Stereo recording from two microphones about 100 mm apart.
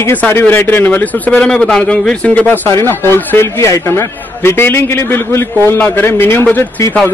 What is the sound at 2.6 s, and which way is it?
A man's voice, 25° left (ahead or behind).